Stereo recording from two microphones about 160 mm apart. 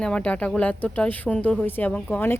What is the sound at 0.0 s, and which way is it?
A woman's voice, 5° left (ahead or behind).